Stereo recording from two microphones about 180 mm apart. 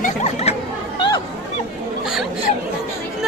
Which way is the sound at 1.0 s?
25° left (ahead or behind).